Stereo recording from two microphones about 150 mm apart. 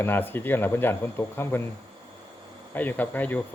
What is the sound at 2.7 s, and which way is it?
Speech, 10° left (ahead or behind).